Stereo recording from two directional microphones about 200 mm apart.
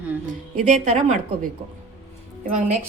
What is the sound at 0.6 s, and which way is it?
Speech, 35° right (ahead or behind).